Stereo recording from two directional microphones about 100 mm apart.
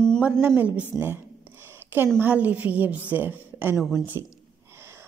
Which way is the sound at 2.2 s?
15° right (ahead or behind).